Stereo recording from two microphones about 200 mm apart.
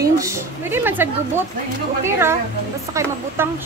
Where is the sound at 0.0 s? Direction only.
15° right (ahead or behind).